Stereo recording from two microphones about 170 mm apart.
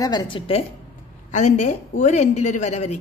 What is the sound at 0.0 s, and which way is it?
Speech, 25° left (ahead or behind).